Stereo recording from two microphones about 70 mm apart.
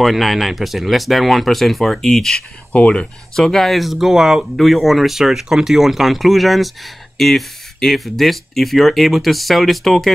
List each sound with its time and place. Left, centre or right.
0.0 s speech: centre
2.7 s speech: centre